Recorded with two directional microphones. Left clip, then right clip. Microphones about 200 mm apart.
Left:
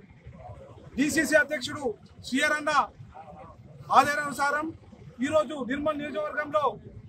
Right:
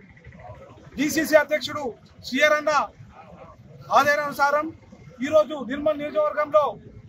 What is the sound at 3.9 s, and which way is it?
Speech, 5° left (ahead or behind).